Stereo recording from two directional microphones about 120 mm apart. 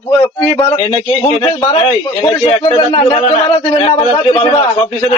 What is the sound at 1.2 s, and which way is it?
Speech, 55° left (ahead or behind).